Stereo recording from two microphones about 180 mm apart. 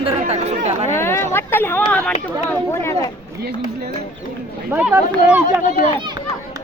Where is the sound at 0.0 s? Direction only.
35° right (ahead or behind).